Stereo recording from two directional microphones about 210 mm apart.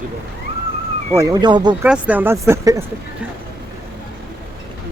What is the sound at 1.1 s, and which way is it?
Speech, 15° right (ahead or behind).